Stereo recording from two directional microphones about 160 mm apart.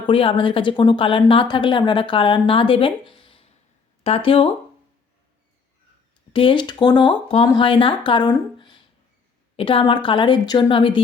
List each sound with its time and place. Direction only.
0.0 s a woman's voice: 35° left (ahead or behind)
6.3 s a woman's voice: 30° left (ahead or behind)